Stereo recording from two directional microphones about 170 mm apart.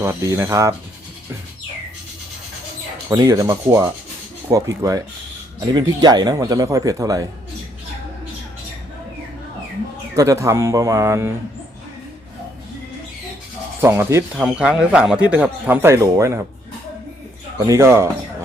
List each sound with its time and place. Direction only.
0.0 s speech: 20° right (ahead or behind)
3.1 s speech: 20° right (ahead or behind)
10.2 s speech: 20° right (ahead or behind)
13.8 s speech: 15° right (ahead or behind)
14.3 s speech: 5° right (ahead or behind)
17.7 s speech: 15° right (ahead or behind)